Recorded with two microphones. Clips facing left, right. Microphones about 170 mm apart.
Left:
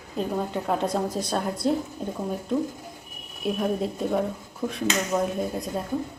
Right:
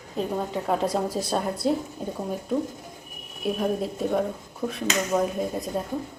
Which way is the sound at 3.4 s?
Centre (ahead or behind).